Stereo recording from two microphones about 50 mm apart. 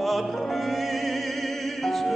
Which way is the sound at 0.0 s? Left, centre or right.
Centre.